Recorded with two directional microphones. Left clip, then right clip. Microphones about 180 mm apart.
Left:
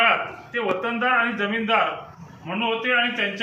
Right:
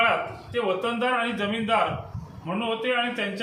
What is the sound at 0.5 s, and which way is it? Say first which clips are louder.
A man's voice: left 1 dB; 30° right (ahead or behind).